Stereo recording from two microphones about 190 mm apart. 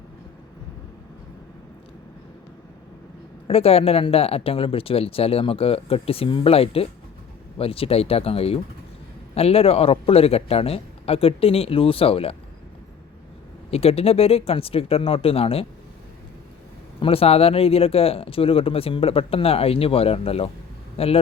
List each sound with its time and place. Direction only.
3.4 s speech: 30° left (ahead or behind)
13.7 s speech: 30° left (ahead or behind)
17.0 s speech: 30° left (ahead or behind)